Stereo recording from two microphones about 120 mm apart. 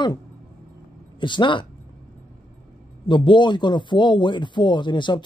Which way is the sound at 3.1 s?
40° left (ahead or behind).